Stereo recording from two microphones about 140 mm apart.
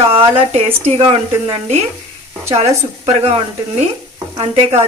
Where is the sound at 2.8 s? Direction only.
50° right (ahead or behind).